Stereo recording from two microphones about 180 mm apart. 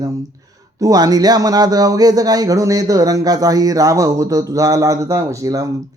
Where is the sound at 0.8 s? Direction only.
20° right (ahead or behind).